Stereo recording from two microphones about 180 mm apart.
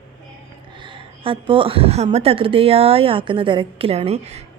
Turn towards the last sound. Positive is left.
turn(degrees=-35)  # may be behind; listen again after turning